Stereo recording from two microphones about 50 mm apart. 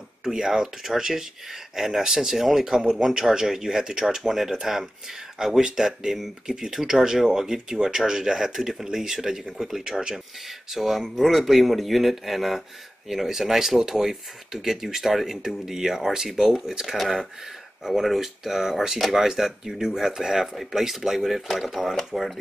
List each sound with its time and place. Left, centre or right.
0.2 s speech: centre